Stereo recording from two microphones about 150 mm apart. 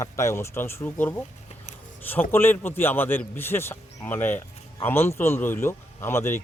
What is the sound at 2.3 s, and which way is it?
A man's voice, 15° left (ahead or behind).